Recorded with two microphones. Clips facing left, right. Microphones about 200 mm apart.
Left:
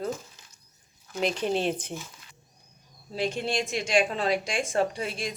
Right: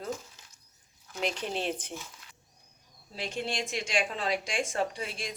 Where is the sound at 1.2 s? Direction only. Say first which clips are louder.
Left 6 dB; 35° left (ahead or behind).